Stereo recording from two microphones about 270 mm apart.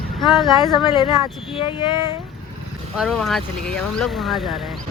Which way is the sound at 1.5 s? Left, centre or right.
Centre.